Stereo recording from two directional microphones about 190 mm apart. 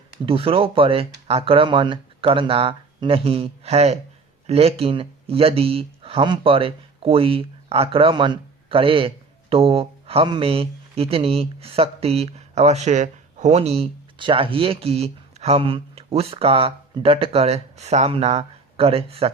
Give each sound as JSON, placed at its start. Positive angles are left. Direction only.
{"t": 0.3, "sound": "speech", "side_deg": -30}